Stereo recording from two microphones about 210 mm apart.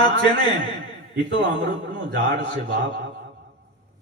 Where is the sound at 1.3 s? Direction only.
60° right (ahead or behind).